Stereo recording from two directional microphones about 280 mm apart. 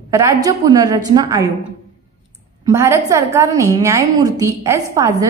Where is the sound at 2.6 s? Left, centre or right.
Centre.